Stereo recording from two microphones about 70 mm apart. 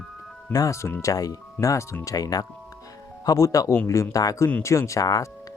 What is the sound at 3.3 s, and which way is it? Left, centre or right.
Speech, left.